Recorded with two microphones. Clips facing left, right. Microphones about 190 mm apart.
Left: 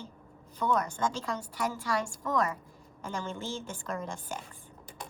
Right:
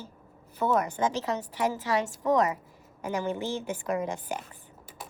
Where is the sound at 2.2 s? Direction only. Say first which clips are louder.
Right 7 dB; 20° right (ahead or behind).